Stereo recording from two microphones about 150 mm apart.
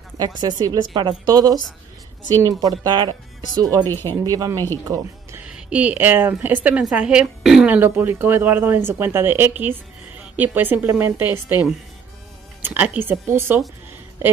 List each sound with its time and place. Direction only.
0.2 s speech: 25° right (ahead or behind)
3.8 s speech: 15° left (ahead or behind)
4.2 s speech: 25° right (ahead or behind)
5.4 s speech: 10° right (ahead or behind)
12.6 s speech: 10° right (ahead or behind)